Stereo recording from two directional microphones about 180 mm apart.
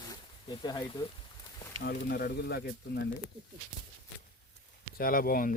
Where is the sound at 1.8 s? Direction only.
60° left (ahead or behind).